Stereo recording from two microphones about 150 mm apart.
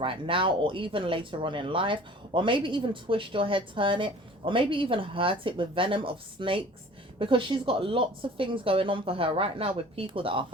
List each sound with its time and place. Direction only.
0.0 s speech: 35° right (ahead or behind)